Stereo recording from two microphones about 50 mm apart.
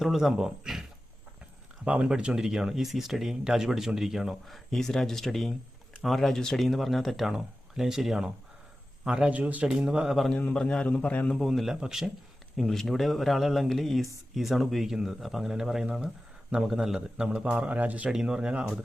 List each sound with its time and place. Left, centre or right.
0.0 s speech: centre
1.8 s speech: right
2.0 s speech: centre
9.0 s speech: centre
10.5 s a man's voice: centre
11.3 s speech: centre
11.7 s speech: centre
12.5 s speech: centre; by 17.5 s right
17.7 s speech: right
18.1 s speech: centre